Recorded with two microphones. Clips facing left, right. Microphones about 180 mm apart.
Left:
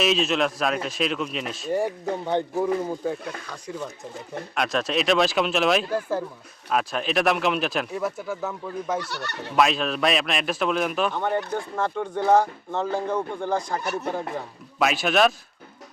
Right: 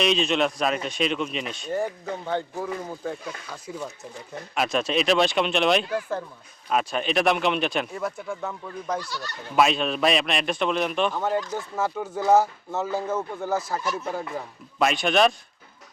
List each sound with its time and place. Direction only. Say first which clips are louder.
0.0 s speech: even; 5° left (ahead or behind)
1.7 s speech: left 3 dB; 15° left (ahead or behind)
3.2 s speech: left 2 dB; 5° right (ahead or behind)
9.0 s speech: left 3 dB; 70° left (ahead or behind)
9.5 s speech: even; centre (ahead or behind)